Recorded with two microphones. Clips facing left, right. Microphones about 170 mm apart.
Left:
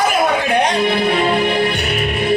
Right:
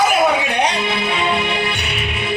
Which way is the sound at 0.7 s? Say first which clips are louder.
Left 5 dB; 50° left (ahead or behind).